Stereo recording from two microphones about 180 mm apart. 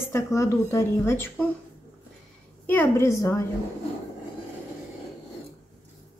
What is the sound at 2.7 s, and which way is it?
Speech, 15° left (ahead or behind).